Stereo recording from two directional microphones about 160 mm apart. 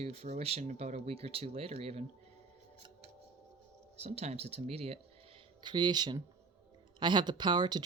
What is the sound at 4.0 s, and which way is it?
Speech, 40° right (ahead or behind).